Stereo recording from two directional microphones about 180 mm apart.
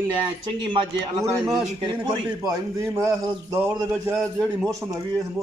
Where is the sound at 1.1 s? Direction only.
20° right (ahead or behind).